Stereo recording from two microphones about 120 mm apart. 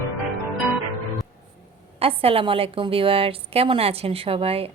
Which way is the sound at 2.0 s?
50° right (ahead or behind).